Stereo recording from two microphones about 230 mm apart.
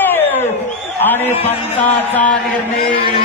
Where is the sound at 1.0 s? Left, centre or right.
Centre.